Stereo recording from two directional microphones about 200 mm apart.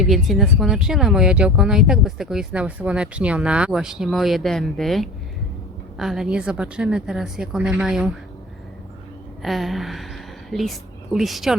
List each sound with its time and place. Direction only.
0.0 s speech: centre (ahead or behind)
9.4 s a woman's voice: centre (ahead or behind)